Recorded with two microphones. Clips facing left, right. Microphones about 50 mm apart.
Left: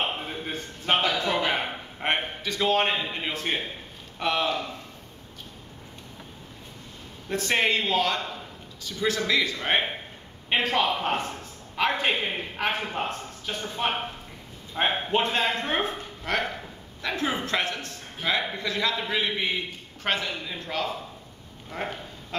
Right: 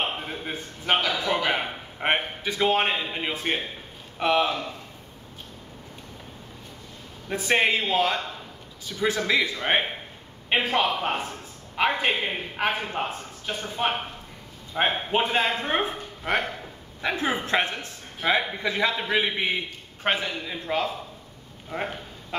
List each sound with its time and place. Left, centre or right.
0.3 s a sound: centre
1.2 s a man's voice: centre
7.2 s a man's voice: centre